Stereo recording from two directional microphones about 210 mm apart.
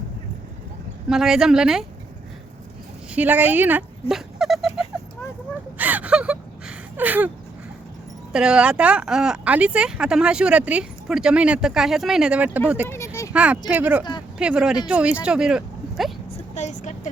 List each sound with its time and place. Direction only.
1.0 s speech: centre (ahead or behind)
3.2 s speech: 10° right (ahead or behind)
5.7 s gasp: 10° right (ahead or behind)
8.3 s speech: 5° right (ahead or behind)
16.6 s vehicle: 35° left (ahead or behind)